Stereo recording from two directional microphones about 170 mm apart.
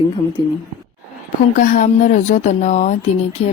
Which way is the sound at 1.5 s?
50° left (ahead or behind).